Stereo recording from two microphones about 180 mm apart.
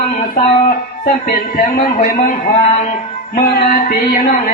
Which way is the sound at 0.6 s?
55° left (ahead or behind).